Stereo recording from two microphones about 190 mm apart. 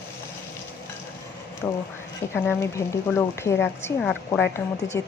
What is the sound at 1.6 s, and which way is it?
Speech, 15° left (ahead or behind).